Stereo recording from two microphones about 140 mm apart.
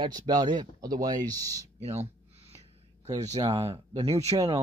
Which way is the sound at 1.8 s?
50° right (ahead or behind).